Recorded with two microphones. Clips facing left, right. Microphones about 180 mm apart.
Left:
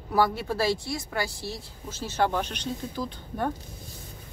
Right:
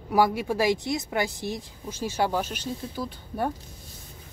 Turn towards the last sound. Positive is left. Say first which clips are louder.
# right 1 dB
turn(degrees=-10)  # may be behind; listen again after turning